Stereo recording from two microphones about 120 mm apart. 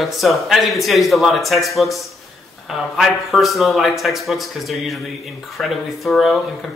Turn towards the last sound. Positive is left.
turn(degrees=0)  # may be behind; listen again after turning